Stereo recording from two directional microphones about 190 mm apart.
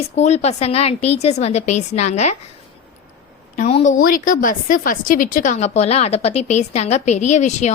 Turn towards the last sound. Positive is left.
turn(degrees=40)  # may be behind; listen again after turning